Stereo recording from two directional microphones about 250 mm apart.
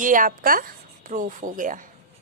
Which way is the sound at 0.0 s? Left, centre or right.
Right.